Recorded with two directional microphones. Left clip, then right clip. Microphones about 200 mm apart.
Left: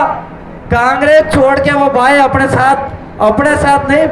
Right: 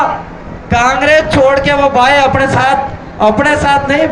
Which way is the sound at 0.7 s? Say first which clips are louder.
Left 1 dB; 35° left (ahead or behind).